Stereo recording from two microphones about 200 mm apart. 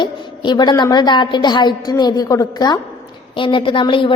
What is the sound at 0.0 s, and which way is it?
A woman's voice, 20° left (ahead or behind).